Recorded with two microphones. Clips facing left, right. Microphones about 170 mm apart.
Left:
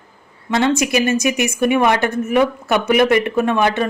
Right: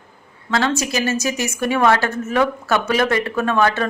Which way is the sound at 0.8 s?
15° left (ahead or behind).